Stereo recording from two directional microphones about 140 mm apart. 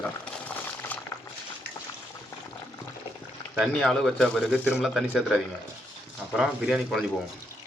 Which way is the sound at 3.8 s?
Centre (ahead or behind).